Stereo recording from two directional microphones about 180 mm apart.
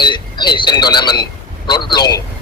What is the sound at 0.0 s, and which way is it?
Speech, 25° left (ahead or behind).